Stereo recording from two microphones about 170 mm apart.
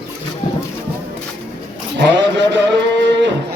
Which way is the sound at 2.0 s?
90° right.